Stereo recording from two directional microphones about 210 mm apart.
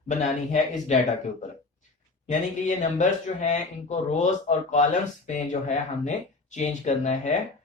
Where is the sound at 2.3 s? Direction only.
35° left (ahead or behind).